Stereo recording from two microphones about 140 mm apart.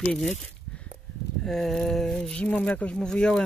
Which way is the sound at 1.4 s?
Centre (ahead or behind).